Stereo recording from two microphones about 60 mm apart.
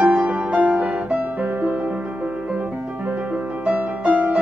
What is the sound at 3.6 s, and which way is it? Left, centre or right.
Music, right.